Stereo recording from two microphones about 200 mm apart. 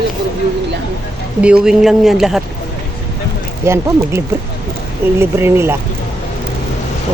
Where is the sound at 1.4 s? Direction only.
5° right (ahead or behind).